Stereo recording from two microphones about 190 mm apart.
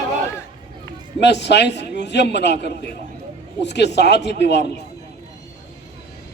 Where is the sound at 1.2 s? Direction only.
65° left (ahead or behind).